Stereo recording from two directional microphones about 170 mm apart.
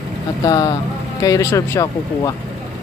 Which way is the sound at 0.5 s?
25° left (ahead or behind).